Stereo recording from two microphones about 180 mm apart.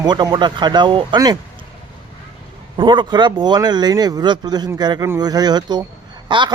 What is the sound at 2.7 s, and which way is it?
Speech, 25° right (ahead or behind).